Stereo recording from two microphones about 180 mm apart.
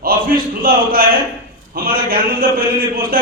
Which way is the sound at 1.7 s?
55° right (ahead or behind).